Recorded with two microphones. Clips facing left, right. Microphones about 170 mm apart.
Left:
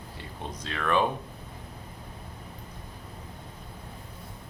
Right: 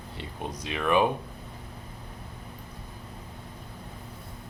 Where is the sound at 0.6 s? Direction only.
15° right (ahead or behind).